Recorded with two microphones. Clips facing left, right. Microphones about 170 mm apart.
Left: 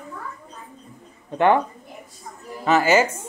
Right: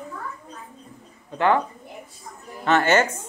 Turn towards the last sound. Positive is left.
turn(degrees=5)  # may be behind; listen again after turning